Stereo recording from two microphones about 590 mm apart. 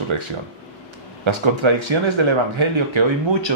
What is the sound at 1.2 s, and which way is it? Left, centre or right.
Speech, right.